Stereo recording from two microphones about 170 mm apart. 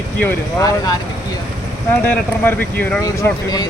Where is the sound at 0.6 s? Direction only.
20° left (ahead or behind).